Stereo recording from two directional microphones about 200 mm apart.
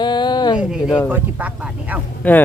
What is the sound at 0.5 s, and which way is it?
Speech, 5° right (ahead or behind).